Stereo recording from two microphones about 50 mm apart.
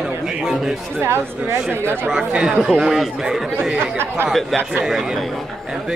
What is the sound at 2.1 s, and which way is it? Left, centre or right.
Speech, centre.